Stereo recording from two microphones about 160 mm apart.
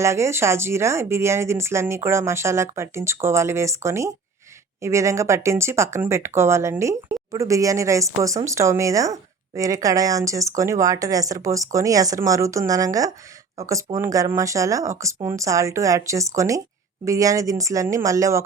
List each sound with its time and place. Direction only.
0.0 s speech: 20° right (ahead or behind)